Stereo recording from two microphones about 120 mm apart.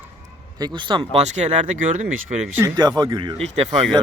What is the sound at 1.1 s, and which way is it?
Speech, 70° right (ahead or behind).